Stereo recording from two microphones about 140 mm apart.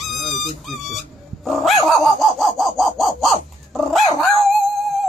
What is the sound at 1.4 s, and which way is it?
Dog, centre (ahead or behind).